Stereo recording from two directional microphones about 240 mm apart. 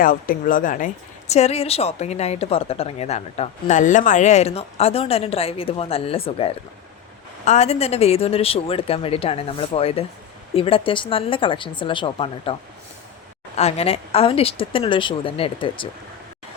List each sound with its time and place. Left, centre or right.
0.0 s a woman's voice: left
13.6 s a woman's voice: left